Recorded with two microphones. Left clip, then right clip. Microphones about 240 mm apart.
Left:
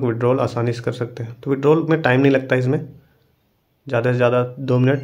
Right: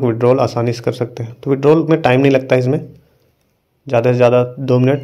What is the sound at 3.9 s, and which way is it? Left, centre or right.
A man's voice, centre.